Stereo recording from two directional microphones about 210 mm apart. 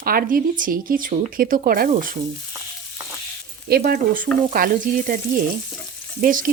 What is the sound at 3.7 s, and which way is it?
Stir, 45° right (ahead or behind).